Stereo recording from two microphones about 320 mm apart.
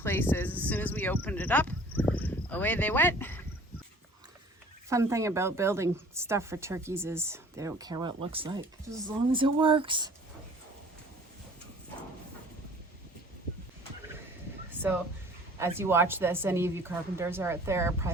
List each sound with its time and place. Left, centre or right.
0.0 s speech: centre
4.9 s a woman's voice: centre
15.5 s a woman's voice: centre